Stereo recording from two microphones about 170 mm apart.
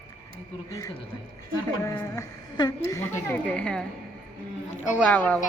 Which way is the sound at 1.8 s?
20° left (ahead or behind).